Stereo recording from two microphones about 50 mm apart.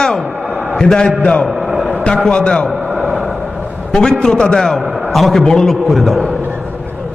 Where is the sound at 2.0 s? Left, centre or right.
Centre.